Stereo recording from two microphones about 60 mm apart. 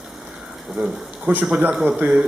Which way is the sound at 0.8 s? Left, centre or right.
Right.